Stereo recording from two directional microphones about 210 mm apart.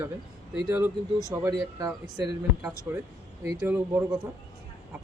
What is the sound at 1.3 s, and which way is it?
Speech, 15° right (ahead or behind).